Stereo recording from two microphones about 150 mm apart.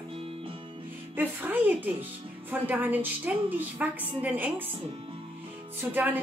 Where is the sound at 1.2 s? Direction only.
10° right (ahead or behind).